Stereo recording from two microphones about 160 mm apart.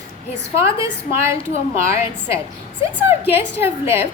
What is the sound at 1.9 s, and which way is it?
A woman's voice, 15° right (ahead or behind).